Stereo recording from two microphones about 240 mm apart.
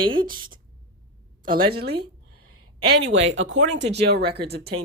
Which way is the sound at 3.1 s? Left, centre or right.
Right.